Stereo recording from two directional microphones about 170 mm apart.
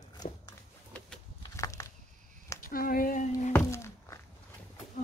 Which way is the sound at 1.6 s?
20° left (ahead or behind).